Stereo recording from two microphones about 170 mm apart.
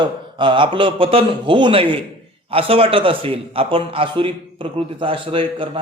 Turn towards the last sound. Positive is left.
turn(degrees=-30)  # may be behind; listen again after turning